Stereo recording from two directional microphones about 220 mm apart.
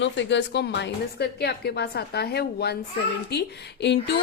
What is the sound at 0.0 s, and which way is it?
Speech, 55° left (ahead or behind).